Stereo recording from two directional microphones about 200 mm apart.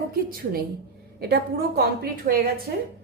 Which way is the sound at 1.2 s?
55° right (ahead or behind).